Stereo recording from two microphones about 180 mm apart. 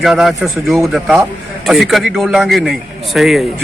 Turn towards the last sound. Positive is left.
turn(degrees=0)  # may be behind; listen again after turning